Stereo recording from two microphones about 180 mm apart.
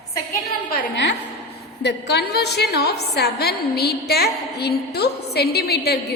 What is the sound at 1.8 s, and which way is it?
A woman's voice, 70° left (ahead or behind).